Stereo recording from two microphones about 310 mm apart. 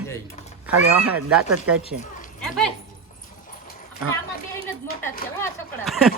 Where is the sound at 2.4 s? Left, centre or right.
Centre.